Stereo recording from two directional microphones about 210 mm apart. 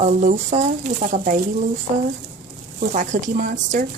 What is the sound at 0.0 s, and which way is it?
Speech, 35° right (ahead or behind).